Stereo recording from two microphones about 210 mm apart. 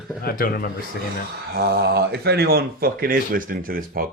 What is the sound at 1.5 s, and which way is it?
Speech, 50° right (ahead or behind).